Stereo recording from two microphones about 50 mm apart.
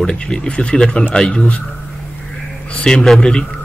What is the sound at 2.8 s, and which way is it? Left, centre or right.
Speech, centre.